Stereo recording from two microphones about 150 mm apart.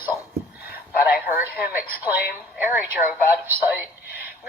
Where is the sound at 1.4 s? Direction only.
15° right (ahead or behind).